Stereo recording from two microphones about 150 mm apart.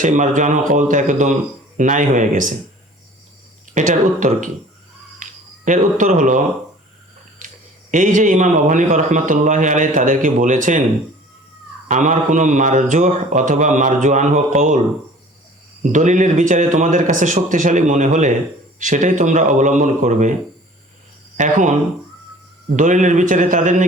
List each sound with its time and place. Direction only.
0.0 s speech: 55° right (ahead or behind)
3.8 s speech: 55° right (ahead or behind)
11.9 s speech: 55° right (ahead or behind)
15.8 s speech: 55° right (ahead or behind)
21.3 s speech: 55° right (ahead or behind)